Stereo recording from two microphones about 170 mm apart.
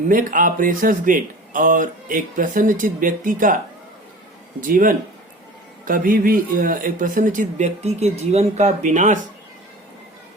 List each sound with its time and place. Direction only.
0.1 s speech: 55° right (ahead or behind)
4.6 s speech: 55° right (ahead or behind)